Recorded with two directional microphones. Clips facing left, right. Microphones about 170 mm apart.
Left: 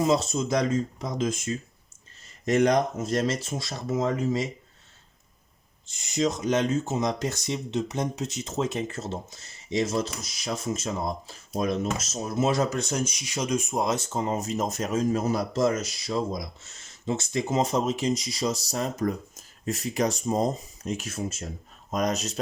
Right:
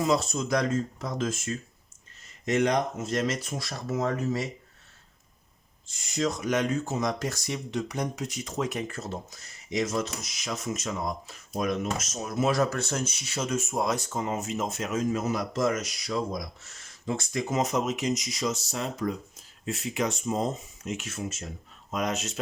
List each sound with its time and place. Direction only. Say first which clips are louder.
0.0 s speech: left 2 dB; 25° left (ahead or behind)
2.5 s speech: left 3 dB; 40° left (ahead or behind); by 4.4 s 20° left (ahead or behind)
5.9 s speech: left 3 dB; 20° left (ahead or behind); by 22.4 s 40° left (ahead or behind)